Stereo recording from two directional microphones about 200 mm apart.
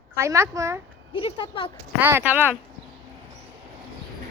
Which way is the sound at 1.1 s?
25° left (ahead or behind).